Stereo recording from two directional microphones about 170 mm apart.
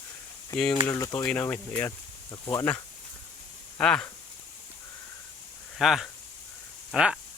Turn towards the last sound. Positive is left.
turn(degrees=0)  # may be behind; listen again after turning